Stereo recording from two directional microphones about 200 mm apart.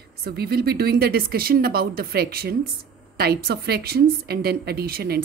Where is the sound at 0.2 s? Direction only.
50° right (ahead or behind).